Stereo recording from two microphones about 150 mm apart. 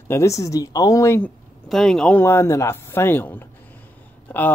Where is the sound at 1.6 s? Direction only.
Centre (ahead or behind).